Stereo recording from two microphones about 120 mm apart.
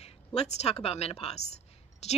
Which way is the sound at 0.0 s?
60° left (ahead or behind).